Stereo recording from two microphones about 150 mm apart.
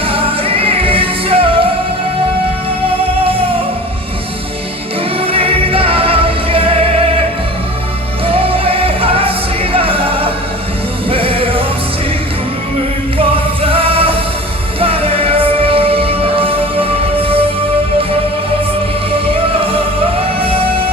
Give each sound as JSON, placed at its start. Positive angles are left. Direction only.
{"t": 0.1, "sound": "music", "side_deg": -40}
{"t": 5.2, "sound": "music", "side_deg": -40}
{"t": 8.3, "sound": "music", "side_deg": -40}
{"t": 13.1, "sound": "music", "side_deg": -40}
{"t": 19.3, "sound": "music", "side_deg": -35}